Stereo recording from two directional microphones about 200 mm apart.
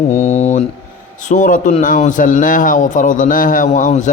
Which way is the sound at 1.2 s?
40° left (ahead or behind).